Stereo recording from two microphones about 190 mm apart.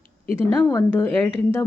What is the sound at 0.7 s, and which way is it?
Speech, 10° left (ahead or behind).